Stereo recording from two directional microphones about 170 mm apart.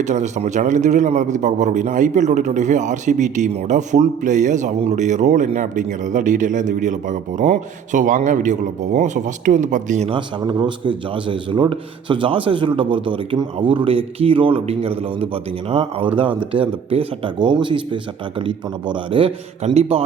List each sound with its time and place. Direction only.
0.0 s a man's voice: 45° right (ahead or behind)
10.1 s a man's voice: 30° right (ahead or behind)